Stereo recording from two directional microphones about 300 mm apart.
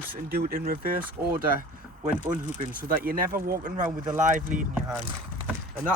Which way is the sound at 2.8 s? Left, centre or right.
Right.